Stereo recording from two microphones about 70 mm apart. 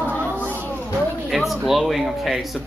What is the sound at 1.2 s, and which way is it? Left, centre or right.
Speech, centre.